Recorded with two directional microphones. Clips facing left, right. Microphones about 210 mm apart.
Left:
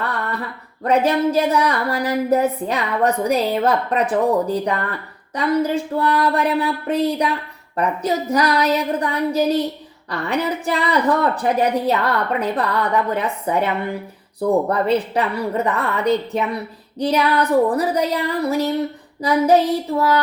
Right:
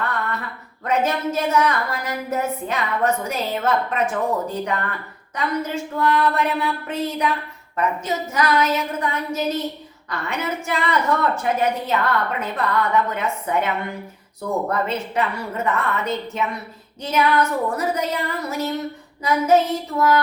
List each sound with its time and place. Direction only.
0.9 s a woman's voice: 35° left (ahead or behind)